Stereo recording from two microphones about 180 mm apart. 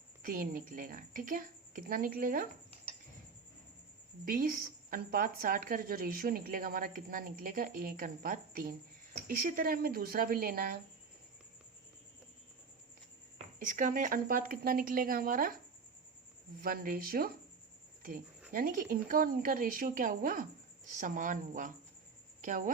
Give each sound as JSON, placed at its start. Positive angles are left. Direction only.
{"t": 0.2, "sound": "a woman's voice", "side_deg": -50}
{"t": 4.3, "sound": "a woman's voice", "side_deg": -50}
{"t": 13.6, "sound": "a woman's voice", "side_deg": -45}
{"t": 16.6, "sound": "speech", "side_deg": -55}
{"t": 18.5, "sound": "a woman's voice", "side_deg": -50}